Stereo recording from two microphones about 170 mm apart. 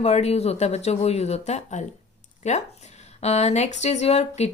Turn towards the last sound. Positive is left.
turn(degrees=40)  # may be behind; listen again after turning